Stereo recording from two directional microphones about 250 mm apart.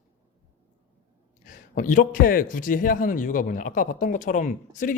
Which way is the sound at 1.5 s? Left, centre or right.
Left.